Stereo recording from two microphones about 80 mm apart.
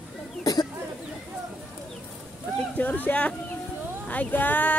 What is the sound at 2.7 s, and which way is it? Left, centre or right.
Speech, left.